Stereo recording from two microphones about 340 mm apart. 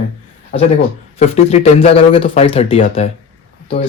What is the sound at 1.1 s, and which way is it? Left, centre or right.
Speech, centre.